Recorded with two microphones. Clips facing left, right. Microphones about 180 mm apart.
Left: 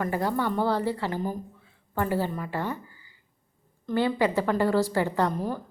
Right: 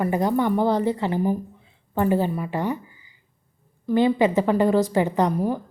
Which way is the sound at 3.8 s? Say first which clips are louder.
Right 6 dB; 15° right (ahead or behind).